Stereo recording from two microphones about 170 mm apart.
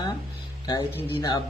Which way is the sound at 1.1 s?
25° left (ahead or behind).